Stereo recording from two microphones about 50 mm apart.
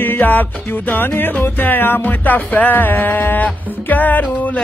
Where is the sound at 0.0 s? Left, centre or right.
Left.